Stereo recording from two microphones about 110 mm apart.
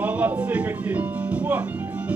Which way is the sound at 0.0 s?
15° right (ahead or behind).